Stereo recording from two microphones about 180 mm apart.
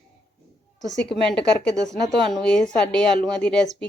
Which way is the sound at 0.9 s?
5° left (ahead or behind).